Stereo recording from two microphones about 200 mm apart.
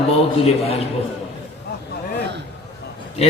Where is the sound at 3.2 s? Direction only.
30° left (ahead or behind).